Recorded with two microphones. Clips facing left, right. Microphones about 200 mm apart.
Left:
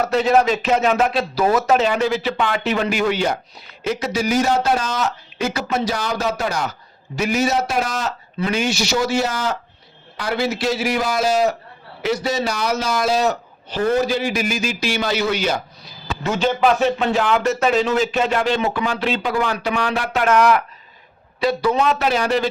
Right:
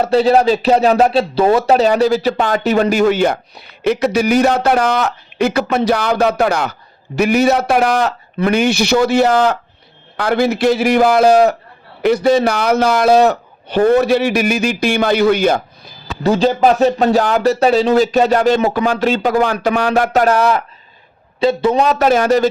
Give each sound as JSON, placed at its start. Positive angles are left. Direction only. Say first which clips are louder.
{"t": 0.0, "sound": "a man's voice", "louder": "right 5 dB", "side_deg": -30}
{"t": 16.2, "sound": "speech", "louder": "right 6 dB", "side_deg": -35}